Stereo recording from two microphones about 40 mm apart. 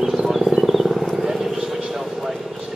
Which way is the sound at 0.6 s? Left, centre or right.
Centre.